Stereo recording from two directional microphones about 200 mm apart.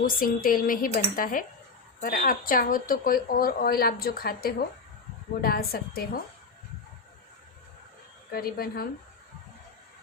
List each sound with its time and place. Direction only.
0.0 s a woman's voice: 45° left (ahead or behind)
8.3 s a woman's voice: 50° left (ahead or behind)